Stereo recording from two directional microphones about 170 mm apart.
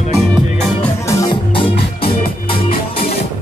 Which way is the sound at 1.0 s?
25° left (ahead or behind).